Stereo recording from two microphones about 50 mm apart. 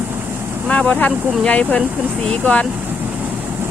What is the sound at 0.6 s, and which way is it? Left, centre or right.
Speech, left.